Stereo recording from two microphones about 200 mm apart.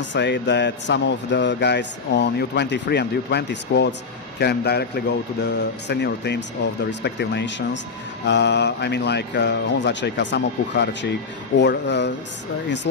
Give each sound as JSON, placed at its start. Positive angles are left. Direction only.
{"t": 0.0, "sound": "speech", "side_deg": 60}